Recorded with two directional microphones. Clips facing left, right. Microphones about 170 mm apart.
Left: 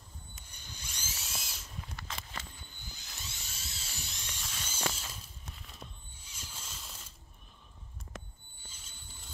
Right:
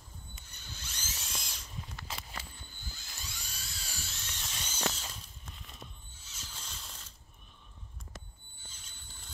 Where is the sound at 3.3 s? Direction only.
25° left (ahead or behind).